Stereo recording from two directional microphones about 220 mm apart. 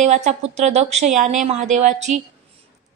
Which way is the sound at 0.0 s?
30° right (ahead or behind).